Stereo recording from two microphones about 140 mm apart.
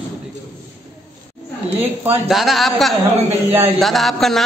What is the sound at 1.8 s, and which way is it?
Speech, 15° right (ahead or behind).